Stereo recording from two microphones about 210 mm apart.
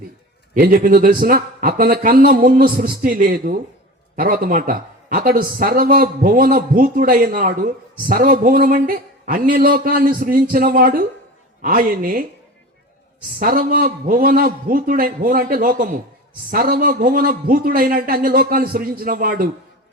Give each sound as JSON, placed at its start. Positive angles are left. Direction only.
{"t": 0.5, "sound": "a man's voice", "side_deg": -40}
{"t": 13.4, "sound": "a man's voice", "side_deg": -40}